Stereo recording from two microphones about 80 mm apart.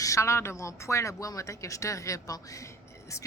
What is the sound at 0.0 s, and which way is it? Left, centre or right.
Speech, left.